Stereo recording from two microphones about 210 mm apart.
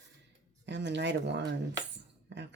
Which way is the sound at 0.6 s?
55° right (ahead or behind).